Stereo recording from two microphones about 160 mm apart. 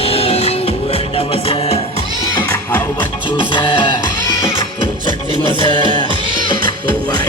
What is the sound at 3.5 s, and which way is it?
Music, 30° left (ahead or behind).